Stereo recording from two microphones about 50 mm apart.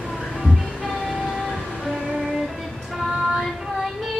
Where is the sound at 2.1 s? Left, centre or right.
Centre.